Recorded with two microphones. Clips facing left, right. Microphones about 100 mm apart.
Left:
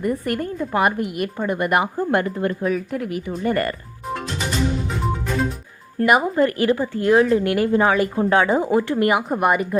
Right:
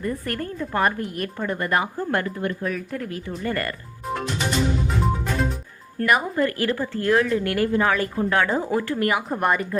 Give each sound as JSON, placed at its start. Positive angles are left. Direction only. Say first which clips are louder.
{"t": 0.0, "sound": "speech", "louder": "left 5 dB", "side_deg": 15}
{"t": 2.6, "sound": "speech", "louder": "left 5 dB", "side_deg": 15}
{"t": 4.9, "sound": "music", "louder": "even", "side_deg": 0}
{"t": 6.0, "sound": "speech", "louder": "left 4 dB", "side_deg": 20}